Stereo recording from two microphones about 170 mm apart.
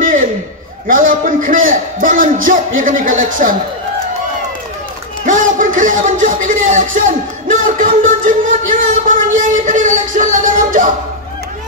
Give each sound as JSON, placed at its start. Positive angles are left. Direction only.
{"t": 0.0, "sound": "a sound", "side_deg": -50}
{"t": 0.8, "sound": "a man's voice", "side_deg": -50}
{"t": 5.2, "sound": "music", "side_deg": -50}